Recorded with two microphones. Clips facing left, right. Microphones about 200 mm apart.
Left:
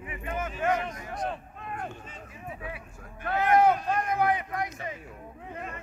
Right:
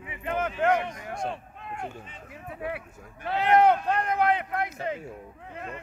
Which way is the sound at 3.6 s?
60° right (ahead or behind).